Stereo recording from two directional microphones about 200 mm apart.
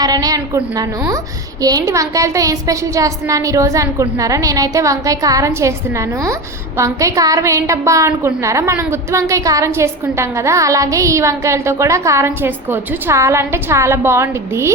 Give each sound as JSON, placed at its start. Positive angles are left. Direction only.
{"t": 0.0, "sound": "a woman's voice", "side_deg": -20}